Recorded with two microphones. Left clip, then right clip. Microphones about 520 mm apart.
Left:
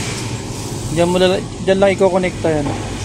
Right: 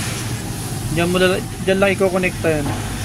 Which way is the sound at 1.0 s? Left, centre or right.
Right.